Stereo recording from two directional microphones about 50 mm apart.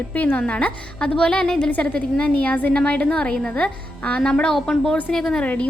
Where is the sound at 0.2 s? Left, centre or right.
Left; by 5.4 s centre.